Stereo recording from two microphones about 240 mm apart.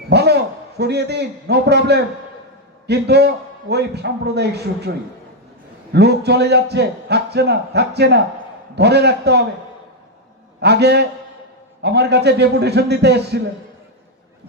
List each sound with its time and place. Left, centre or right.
0.1 s a sound: right
0.8 s a man's voice: right
5.9 s a man's voice: right
10.6 s a man's voice: right